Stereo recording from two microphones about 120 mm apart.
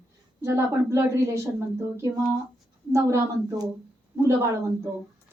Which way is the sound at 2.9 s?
25° right (ahead or behind).